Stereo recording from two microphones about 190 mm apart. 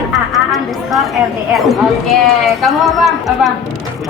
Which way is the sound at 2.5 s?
Centre (ahead or behind).